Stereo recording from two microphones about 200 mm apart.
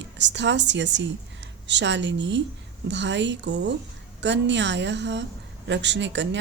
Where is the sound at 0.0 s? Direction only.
60° right (ahead or behind).